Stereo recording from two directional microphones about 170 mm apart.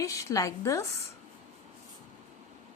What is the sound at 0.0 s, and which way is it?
Speech, 20° left (ahead or behind).